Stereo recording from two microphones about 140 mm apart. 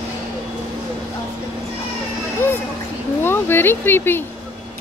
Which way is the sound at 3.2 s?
15° left (ahead or behind).